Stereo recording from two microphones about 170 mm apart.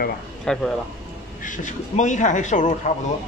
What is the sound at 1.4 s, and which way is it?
A man's voice, 50° left (ahead or behind).